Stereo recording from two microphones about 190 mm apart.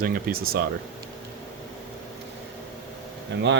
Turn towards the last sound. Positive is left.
turn(degrees=-70)  # may be behind; listen again after turning